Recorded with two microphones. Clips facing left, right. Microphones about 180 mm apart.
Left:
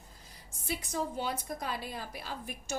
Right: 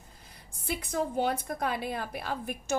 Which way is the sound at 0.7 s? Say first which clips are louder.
Right 4 dB; 60° right (ahead or behind).